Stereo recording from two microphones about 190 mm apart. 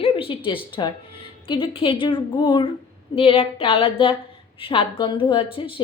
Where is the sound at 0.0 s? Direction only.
30° left (ahead or behind).